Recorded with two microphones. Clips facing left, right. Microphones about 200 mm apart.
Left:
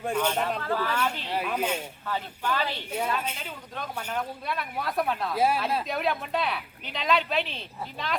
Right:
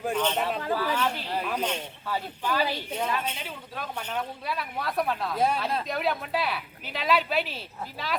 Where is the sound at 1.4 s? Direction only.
5° left (ahead or behind).